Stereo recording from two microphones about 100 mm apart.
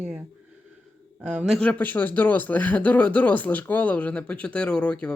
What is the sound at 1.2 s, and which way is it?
Speech, 15° right (ahead or behind).